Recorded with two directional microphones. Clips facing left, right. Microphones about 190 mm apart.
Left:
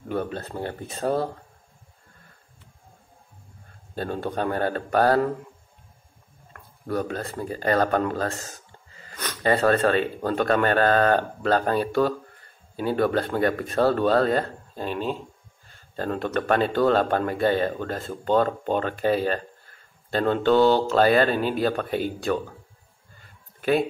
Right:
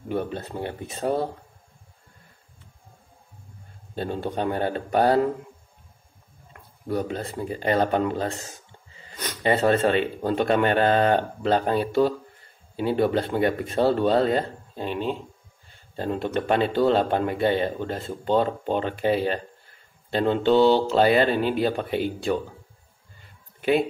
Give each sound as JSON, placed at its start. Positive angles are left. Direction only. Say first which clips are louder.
{"t": 0.1, "sound": "speech", "louder": "even", "side_deg": -20}
{"t": 3.9, "sound": "speech", "louder": "even", "side_deg": -20}
{"t": 6.5, "sound": "speech", "louder": "even", "side_deg": -20}